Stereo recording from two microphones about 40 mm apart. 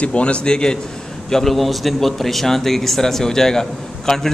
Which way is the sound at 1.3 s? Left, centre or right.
Centre.